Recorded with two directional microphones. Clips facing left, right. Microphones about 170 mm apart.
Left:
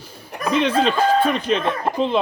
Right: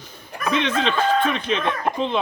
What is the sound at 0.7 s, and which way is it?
Speech, 35° left (ahead or behind).